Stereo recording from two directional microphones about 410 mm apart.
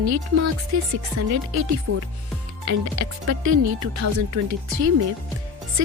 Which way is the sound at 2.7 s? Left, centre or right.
Right.